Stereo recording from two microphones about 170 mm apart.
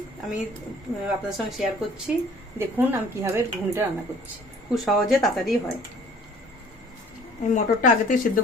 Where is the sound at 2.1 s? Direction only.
5° right (ahead or behind).